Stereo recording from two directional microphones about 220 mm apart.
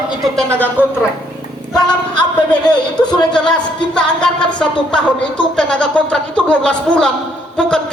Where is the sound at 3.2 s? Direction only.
5° left (ahead or behind).